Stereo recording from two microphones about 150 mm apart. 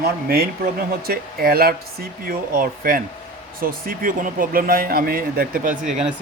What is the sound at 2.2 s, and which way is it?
Speech, 70° right (ahead or behind).